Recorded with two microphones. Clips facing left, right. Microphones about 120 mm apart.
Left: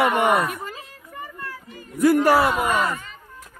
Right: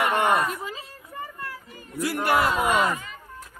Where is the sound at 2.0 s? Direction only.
45° left (ahead or behind).